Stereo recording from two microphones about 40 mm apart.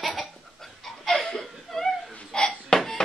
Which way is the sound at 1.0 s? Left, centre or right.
Centre.